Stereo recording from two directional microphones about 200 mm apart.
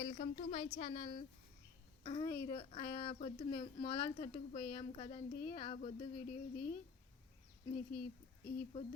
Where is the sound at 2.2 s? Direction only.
15° left (ahead or behind).